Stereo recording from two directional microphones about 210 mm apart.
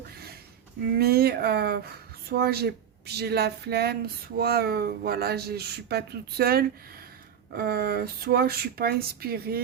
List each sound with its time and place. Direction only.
0.9 s speech: 45° right (ahead or behind)